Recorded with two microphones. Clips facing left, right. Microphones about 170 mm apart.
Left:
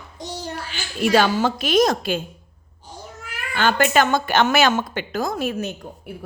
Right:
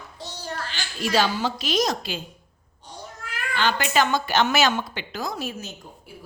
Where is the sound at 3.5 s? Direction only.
50° left (ahead or behind).